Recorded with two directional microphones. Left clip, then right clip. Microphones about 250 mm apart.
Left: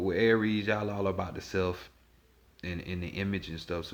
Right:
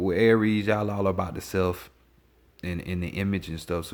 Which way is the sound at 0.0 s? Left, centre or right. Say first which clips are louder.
Right 5 dB; right.